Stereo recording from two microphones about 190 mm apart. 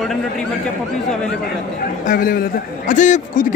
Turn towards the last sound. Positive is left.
turn(degrees=40)  # may be behind; listen again after turning